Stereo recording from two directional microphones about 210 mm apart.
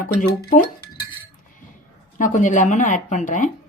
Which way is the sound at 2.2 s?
40° left (ahead or behind).